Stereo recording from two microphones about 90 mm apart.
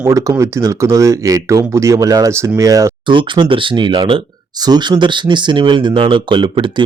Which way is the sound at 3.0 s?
65° right (ahead or behind).